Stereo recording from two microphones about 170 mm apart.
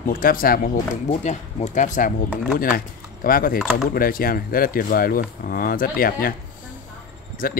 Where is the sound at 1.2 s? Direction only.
45° left (ahead or behind).